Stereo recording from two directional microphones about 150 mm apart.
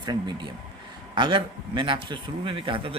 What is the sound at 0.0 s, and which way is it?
Speech, 30° right (ahead or behind).